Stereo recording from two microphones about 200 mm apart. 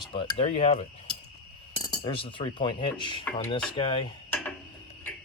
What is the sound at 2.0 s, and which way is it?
Speech, 25° left (ahead or behind).